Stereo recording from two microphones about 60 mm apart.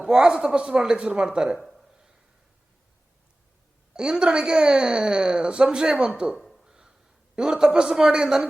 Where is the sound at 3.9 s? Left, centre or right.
Centre.